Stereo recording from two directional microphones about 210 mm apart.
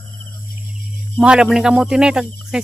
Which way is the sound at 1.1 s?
5° right (ahead or behind).